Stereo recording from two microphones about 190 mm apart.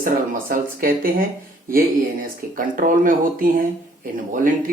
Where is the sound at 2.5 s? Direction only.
45° right (ahead or behind).